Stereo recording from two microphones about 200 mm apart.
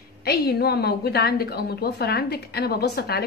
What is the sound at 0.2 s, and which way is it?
A woman's voice, 50° left (ahead or behind).